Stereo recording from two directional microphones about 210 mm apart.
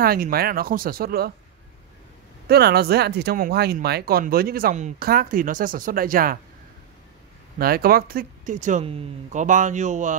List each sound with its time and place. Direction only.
0.0 s speech: 45° right (ahead or behind)
2.4 s speech: 50° right (ahead or behind)
7.5 s speech: 45° right (ahead or behind)